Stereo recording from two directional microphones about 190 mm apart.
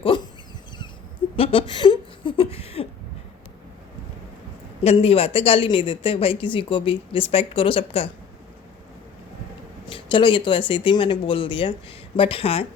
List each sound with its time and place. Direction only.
1.4 s a sound: 30° left (ahead or behind)
4.8 s speech: 30° left (ahead or behind)
9.9 s speech: 25° left (ahead or behind)